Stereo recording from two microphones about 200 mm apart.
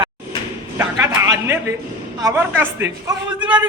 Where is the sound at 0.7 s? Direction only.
15° right (ahead or behind).